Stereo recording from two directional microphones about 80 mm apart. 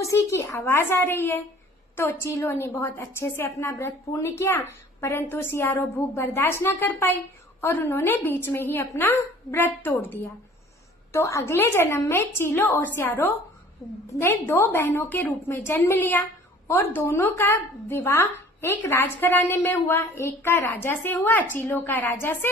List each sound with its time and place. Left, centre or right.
0.0 s a woman's voice: left
11.1 s a woman's voice: left